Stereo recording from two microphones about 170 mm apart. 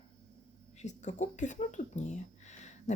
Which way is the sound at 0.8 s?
45° left (ahead or behind).